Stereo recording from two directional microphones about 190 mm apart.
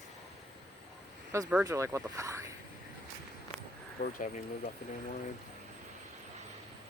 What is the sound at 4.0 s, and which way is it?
Speech, 45° left (ahead or behind).